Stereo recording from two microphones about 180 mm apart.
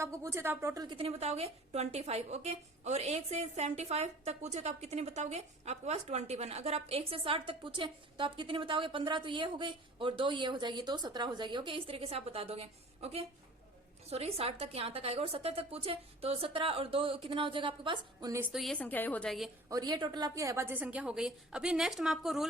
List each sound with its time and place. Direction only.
0.0 s a woman's voice: 15° right (ahead or behind)
18.5 s a woman's voice: centre (ahead or behind)
19.7 s a woman's voice: 25° right (ahead or behind); by 22.4 s centre (ahead or behind)